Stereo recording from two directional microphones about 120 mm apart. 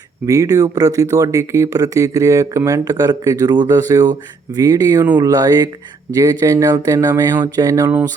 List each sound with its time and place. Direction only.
0.3 s speech: 30° right (ahead or behind)